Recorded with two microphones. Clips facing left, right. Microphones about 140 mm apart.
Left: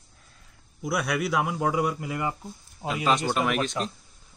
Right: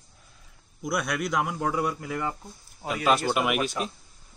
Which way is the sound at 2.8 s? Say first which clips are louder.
Right 1 dB; 5° right (ahead or behind).